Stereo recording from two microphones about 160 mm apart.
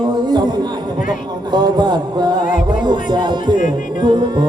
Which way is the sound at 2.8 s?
30° right (ahead or behind).